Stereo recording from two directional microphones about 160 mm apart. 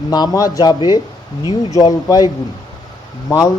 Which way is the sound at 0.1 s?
25° left (ahead or behind).